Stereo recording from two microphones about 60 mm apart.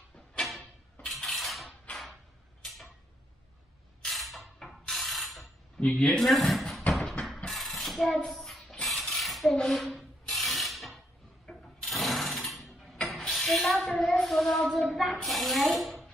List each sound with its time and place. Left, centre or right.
0.4 s a sound: centre
1.0 s cutlery: centre
2.6 s arrow: centre
4.0 s mechanisms: centre
5.8 s a woman's voice: centre
6.1 s speech: centre
6.9 s a sound: centre
8.8 s mechanisms: centre
10.3 s a sound: centre
11.5 s mechanisms: centre
11.8 s mechanisms: centre
12.9 s a sound: centre
15.2 s speech: centre